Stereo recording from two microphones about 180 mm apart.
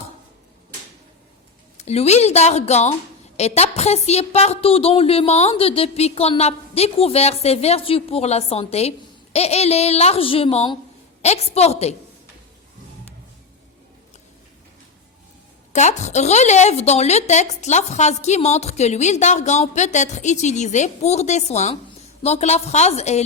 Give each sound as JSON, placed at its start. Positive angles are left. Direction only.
{"t": 1.8, "sound": "a woman's voice", "side_deg": 35}
{"t": 15.7, "sound": "a woman's voice", "side_deg": 40}